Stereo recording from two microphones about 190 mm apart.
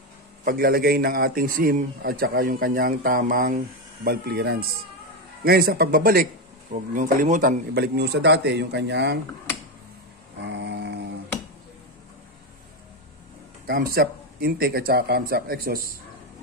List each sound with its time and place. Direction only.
0.5 s a man's voice: 50° right (ahead or behind)
10.4 s a sound: 65° right (ahead or behind)
13.7 s a man's voice: 50° right (ahead or behind)